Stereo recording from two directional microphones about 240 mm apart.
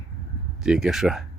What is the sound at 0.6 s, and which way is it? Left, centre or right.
Speech, centre.